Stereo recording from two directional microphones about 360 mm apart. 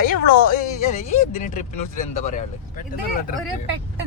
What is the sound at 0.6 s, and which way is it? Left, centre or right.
Speech, centre.